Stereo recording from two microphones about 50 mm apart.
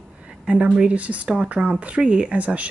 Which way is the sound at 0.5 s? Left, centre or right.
Right.